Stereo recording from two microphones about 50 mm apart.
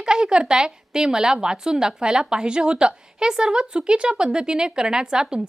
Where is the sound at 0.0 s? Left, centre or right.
Centre.